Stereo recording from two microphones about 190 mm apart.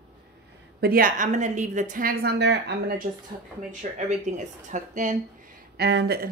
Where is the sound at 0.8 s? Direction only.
50° right (ahead or behind).